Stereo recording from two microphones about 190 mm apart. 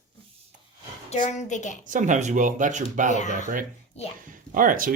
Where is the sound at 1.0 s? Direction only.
40° left (ahead or behind).